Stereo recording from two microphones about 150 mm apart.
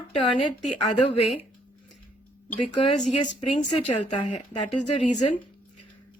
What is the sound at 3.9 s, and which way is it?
A woman's voice, 50° left (ahead or behind).